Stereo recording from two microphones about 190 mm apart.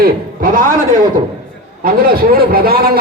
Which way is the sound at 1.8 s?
50° right (ahead or behind).